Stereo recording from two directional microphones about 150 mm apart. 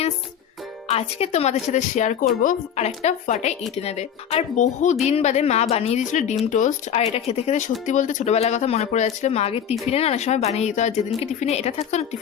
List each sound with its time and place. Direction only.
0.9 s speech: 45° left (ahead or behind)
2.2 s speech: 60° left (ahead or behind); by 12.0 s 45° left (ahead or behind)